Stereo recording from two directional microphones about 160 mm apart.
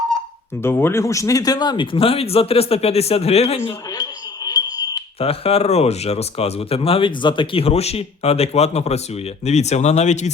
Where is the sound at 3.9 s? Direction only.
25° left (ahead or behind).